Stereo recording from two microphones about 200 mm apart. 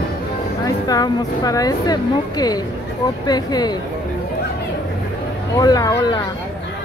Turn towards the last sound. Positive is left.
turn(degrees=20)  # may be behind; listen again after turning